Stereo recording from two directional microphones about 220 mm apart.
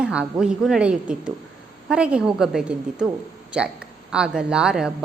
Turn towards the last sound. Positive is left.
turn(degrees=-5)  # may be behind; listen again after turning